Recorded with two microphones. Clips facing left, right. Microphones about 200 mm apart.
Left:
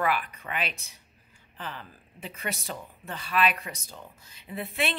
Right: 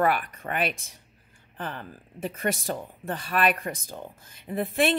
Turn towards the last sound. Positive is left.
turn(degrees=-50)  # may be behind; listen again after turning